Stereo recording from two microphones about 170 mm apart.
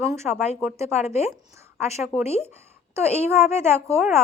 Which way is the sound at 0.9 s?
40° left (ahead or behind).